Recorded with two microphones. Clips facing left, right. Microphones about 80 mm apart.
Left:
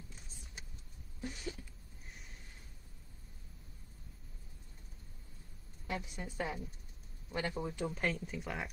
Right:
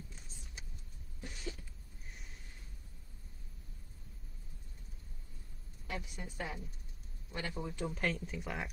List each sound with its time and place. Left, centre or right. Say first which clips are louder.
1.2 s a sound: left 3 dB; left
5.9 s a woman's voice: left 3 dB; left
7.9 s speech: even; centre